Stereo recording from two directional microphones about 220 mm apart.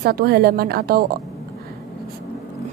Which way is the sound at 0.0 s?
45° right (ahead or behind).